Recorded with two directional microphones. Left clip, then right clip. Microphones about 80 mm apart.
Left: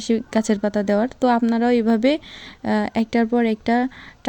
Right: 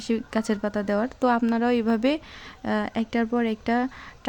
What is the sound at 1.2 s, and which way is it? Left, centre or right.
Speech, left.